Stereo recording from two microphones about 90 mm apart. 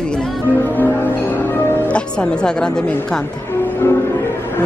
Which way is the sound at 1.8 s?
15° left (ahead or behind).